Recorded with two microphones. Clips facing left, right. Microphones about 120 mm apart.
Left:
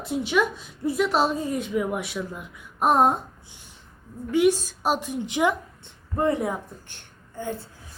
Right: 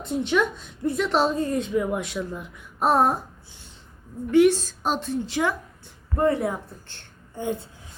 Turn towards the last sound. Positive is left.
turn(degrees=-20)  # may be behind; listen again after turning